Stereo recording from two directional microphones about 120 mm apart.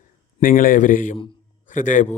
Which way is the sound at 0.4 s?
55° left (ahead or behind).